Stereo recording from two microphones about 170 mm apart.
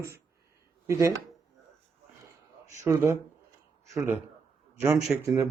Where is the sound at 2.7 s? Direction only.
15° right (ahead or behind).